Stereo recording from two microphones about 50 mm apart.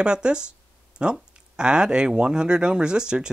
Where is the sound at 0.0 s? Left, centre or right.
Centre.